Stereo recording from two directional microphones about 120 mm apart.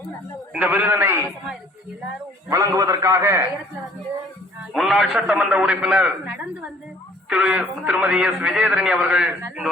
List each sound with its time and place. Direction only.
0.5 s a man's voice: 10° right (ahead or behind)
2.5 s a man's voice: 30° right (ahead or behind)
4.7 s a man's voice: centre (ahead or behind)